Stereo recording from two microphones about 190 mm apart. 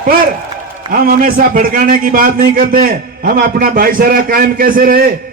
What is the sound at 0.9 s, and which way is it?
A man's voice, 50° right (ahead or behind).